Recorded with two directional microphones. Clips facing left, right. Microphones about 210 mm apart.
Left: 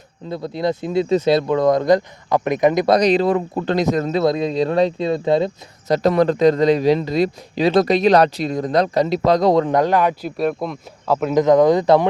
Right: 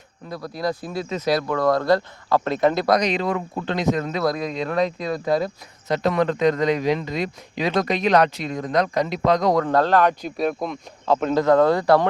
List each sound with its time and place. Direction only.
0.3 s speech: 25° left (ahead or behind)
2.9 s a man's voice: 35° left (ahead or behind)
5.9 s a man's voice: 35° left (ahead or behind)
9.6 s a man's voice: 15° left (ahead or behind)